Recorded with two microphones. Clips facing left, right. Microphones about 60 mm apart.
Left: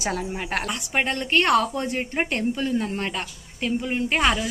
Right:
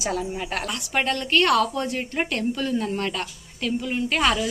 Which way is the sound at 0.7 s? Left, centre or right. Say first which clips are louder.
Right 3 dB; left.